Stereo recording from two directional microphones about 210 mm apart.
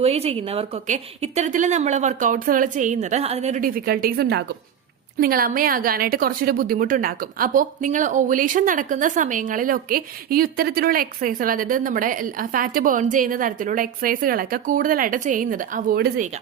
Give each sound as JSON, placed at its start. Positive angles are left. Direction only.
{"t": 0.0, "sound": "a woman's voice", "side_deg": -30}